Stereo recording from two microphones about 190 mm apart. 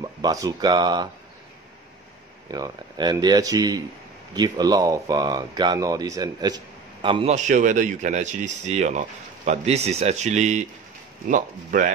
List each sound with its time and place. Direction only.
0.0 s speech: 20° right (ahead or behind)
2.4 s speech: 20° right (ahead or behind)
7.3 s speech: 40° right (ahead or behind)